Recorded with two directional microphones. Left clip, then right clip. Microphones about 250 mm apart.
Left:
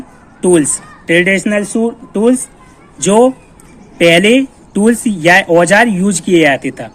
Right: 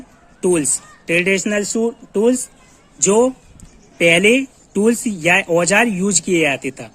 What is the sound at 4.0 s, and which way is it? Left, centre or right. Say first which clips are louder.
Speech: left 5 dB; right.